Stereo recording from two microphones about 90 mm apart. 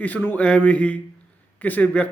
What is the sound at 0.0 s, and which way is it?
A man's voice, 20° left (ahead or behind).